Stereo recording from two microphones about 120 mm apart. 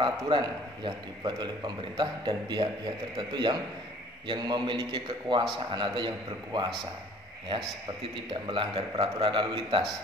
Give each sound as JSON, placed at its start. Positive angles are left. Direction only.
{"t": 0.0, "sound": "a man's voice", "side_deg": -40}
{"t": 8.3, "sound": "a man's voice", "side_deg": -45}